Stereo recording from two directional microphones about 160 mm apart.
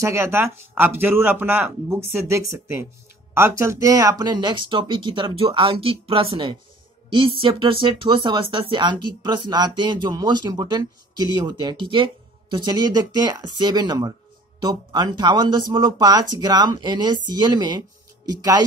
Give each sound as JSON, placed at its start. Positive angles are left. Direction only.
{"t": 0.0, "sound": "speech", "side_deg": -15}